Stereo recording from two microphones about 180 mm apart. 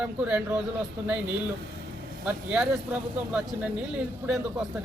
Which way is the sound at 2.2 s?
5° right (ahead or behind).